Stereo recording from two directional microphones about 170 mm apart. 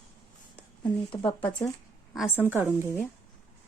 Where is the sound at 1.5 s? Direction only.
25° left (ahead or behind).